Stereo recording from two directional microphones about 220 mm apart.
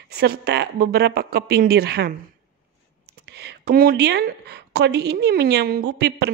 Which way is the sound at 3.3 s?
50° right (ahead or behind).